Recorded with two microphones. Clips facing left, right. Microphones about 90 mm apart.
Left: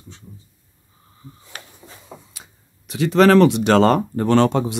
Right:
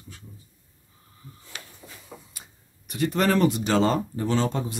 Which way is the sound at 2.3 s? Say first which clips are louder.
Left 3 dB; 90° left.